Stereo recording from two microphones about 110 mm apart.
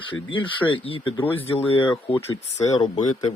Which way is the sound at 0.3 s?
50° left (ahead or behind).